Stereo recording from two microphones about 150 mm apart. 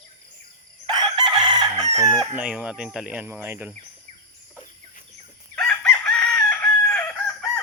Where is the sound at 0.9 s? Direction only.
30° right (ahead or behind).